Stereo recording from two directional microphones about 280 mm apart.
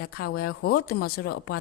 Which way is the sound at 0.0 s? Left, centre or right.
Left.